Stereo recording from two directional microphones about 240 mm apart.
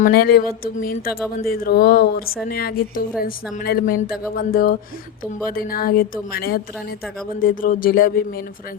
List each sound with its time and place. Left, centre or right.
0.0 s speech: left